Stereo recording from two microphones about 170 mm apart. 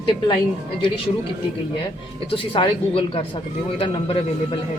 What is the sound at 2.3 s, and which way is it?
Speech, 30° left (ahead or behind).